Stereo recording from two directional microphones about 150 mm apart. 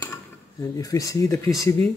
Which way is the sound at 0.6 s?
20° left (ahead or behind).